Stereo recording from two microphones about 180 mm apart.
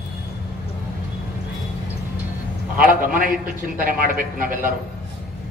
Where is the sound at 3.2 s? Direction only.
50° right (ahead or behind).